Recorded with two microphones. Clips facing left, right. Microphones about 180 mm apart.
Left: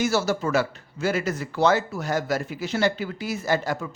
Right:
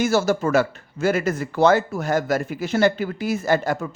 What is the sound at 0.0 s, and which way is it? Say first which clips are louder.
Speech: right 4 dB; 50° right (ahead or behind).